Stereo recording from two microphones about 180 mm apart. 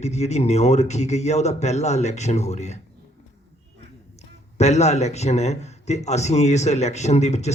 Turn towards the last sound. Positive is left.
turn(degrees=40)  # may be behind; listen again after turning